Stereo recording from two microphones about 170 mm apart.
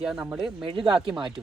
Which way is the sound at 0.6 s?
30° right (ahead or behind).